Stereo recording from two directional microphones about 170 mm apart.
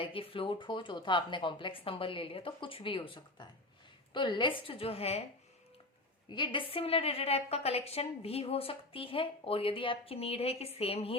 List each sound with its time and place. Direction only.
0.0 s a woman's voice: 30° left (ahead or behind)
6.3 s a woman's voice: 30° left (ahead or behind)